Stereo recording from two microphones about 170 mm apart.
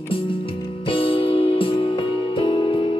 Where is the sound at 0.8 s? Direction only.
30° left (ahead or behind).